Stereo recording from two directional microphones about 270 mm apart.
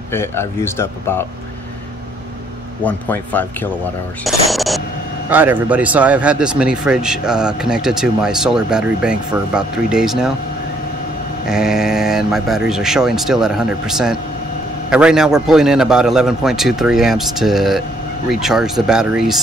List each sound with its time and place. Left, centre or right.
0.1 s speech: centre
2.8 s speech: centre
11.4 s speech: centre